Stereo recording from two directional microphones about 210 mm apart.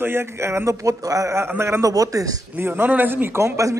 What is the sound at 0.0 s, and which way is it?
A man's voice, 10° right (ahead or behind).